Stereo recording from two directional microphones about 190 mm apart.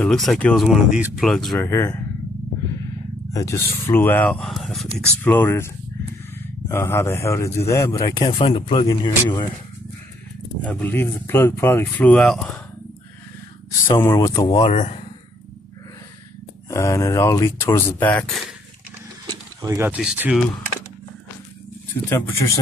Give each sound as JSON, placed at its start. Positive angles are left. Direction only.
{"t": 0.0, "sound": "speech", "side_deg": 0}
{"t": 1.7, "sound": "speech", "side_deg": 15}
{"t": 3.3, "sound": "speech", "side_deg": 15}
{"t": 5.2, "sound": "speech", "side_deg": 10}
{"t": 10.6, "sound": "speech", "side_deg": 5}
{"t": 13.8, "sound": "speech", "side_deg": 25}
{"t": 14.7, "sound": "speech", "side_deg": 35}
{"t": 16.6, "sound": "speech", "side_deg": 15}
{"t": 19.6, "sound": "speech", "side_deg": -15}
{"t": 22.1, "sound": "speech", "side_deg": 15}